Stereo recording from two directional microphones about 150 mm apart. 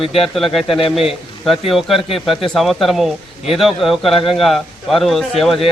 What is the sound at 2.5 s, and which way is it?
A man's voice, centre (ahead or behind).